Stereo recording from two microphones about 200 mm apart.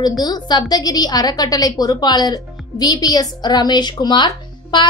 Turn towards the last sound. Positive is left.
turn(degrees=20)  # may be behind; listen again after turning